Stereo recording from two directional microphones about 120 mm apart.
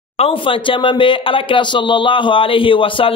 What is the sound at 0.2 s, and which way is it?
Speech, 45° left (ahead or behind).